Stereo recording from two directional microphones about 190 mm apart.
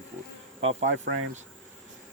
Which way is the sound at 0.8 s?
75° right (ahead or behind).